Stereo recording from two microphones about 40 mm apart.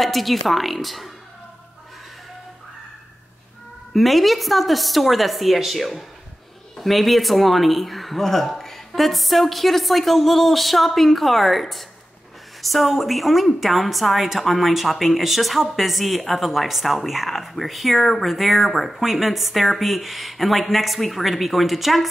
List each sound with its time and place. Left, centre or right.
0.0 s a woman's voice: centre
3.9 s a woman's voice: centre